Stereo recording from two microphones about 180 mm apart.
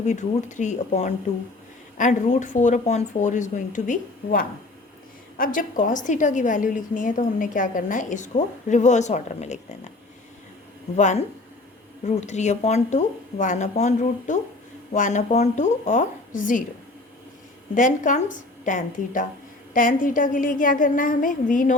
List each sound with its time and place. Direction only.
0.0 s a woman's voice: 40° left (ahead or behind)
10.9 s a woman's voice: 40° left (ahead or behind)
17.7 s a woman's voice: 45° left (ahead or behind)